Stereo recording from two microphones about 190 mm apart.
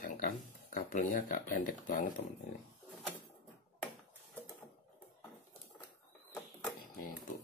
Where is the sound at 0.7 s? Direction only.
45° left (ahead or behind).